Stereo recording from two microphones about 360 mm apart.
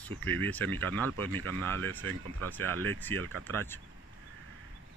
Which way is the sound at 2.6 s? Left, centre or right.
Right.